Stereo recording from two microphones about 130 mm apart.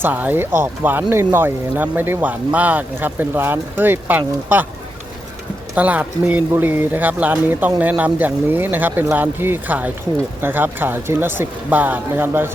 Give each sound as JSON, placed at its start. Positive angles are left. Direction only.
{"t": 0.0, "sound": "speech", "side_deg": -15}
{"t": 5.7, "sound": "speech", "side_deg": -10}